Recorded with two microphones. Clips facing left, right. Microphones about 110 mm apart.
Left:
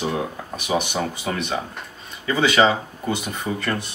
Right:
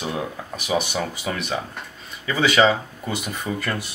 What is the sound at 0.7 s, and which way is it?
Speech, 15° left (ahead or behind).